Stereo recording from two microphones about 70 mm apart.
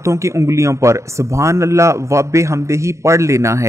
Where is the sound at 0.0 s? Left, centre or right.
Right.